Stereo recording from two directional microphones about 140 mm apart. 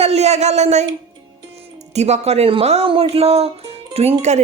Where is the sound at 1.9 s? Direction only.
50° right (ahead or behind).